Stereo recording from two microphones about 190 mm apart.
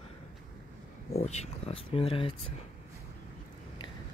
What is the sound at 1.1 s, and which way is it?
Speech, 35° left (ahead or behind).